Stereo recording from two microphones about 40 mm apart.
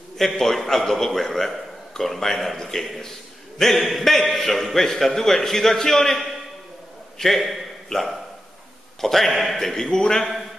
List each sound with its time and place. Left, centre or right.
0.2 s a man's voice: centre
9.6 s a man's voice: centre